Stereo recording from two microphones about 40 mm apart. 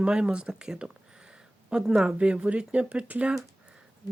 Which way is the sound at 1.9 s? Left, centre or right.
Right.